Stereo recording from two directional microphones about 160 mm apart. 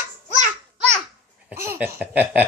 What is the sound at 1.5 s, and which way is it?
Laughter, 15° right (ahead or behind).